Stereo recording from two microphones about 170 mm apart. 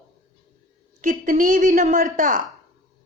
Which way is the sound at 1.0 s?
50° right (ahead or behind).